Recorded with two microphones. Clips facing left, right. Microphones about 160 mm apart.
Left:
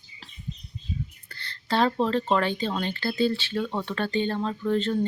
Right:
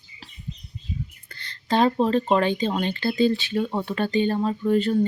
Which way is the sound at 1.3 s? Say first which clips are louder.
Right 4 dB; 15° right (ahead or behind).